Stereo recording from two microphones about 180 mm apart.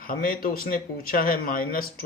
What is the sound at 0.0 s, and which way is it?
A man's voice, 55° left (ahead or behind).